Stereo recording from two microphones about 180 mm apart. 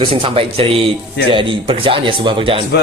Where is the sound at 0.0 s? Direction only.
30° right (ahead or behind).